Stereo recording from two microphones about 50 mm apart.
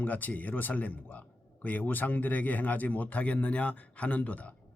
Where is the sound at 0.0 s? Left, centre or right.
Left.